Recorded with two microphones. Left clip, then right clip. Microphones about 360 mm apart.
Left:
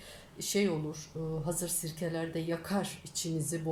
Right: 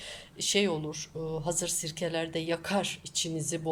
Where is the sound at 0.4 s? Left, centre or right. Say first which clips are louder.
Right 4 dB; right.